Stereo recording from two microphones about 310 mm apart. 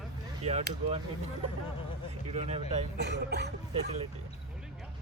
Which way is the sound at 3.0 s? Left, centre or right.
Right.